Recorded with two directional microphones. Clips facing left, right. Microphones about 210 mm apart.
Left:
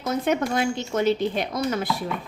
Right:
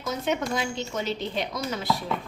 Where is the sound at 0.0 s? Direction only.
55° left (ahead or behind).